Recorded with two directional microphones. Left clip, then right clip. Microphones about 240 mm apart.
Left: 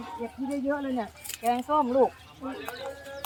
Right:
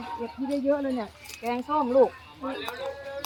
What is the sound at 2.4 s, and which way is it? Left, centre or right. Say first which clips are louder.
Speech: right 4 dB; right.